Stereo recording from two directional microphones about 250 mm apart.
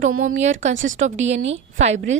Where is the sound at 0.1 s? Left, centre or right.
Right.